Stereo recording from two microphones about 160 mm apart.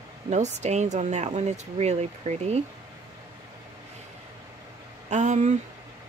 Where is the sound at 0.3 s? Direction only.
45° right (ahead or behind).